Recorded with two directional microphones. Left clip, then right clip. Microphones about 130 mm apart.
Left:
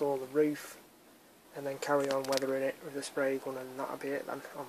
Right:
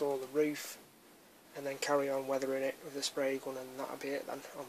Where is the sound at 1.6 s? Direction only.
5° right (ahead or behind).